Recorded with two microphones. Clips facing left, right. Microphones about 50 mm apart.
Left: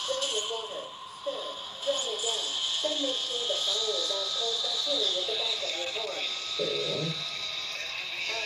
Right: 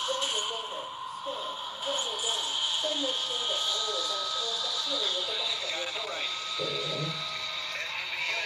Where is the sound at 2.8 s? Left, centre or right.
Right.